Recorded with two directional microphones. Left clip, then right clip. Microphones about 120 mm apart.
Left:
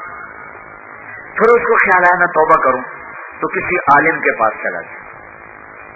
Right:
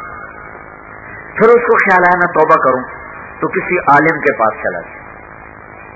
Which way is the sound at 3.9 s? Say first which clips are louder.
Right 1 dB; 30° right (ahead or behind).